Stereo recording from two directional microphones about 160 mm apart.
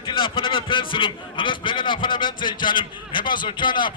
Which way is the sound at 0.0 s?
35° left (ahead or behind).